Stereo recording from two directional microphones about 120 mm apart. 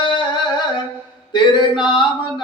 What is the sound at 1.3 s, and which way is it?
Male singing, 40° left (ahead or behind).